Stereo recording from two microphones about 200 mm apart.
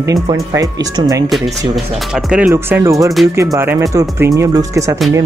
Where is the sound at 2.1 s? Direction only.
Centre (ahead or behind).